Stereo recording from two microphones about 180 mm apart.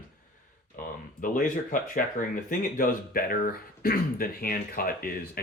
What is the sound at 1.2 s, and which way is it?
Speech, 50° left (ahead or behind).